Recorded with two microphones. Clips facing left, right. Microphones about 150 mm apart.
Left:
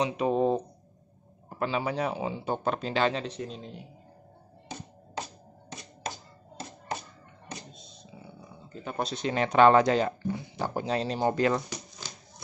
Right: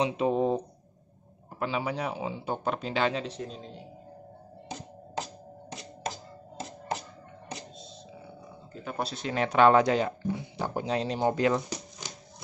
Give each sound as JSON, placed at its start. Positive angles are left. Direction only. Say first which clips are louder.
{"t": 0.0, "sound": "speech", "louder": "even", "side_deg": -20}
{"t": 1.6, "sound": "speech", "louder": "left 2 dB", "side_deg": -10}
{"t": 8.8, "sound": "speech", "louder": "left 2 dB", "side_deg": -5}